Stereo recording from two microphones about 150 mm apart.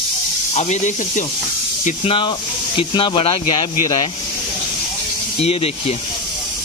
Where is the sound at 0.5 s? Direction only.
50° left (ahead or behind).